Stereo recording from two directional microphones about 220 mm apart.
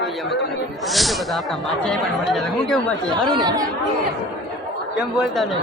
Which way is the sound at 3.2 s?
20° right (ahead or behind).